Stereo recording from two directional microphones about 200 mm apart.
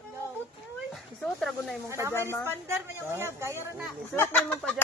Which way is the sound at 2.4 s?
10° right (ahead or behind).